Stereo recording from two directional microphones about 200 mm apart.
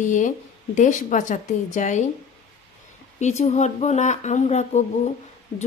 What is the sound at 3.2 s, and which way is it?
Speech, 35° left (ahead or behind).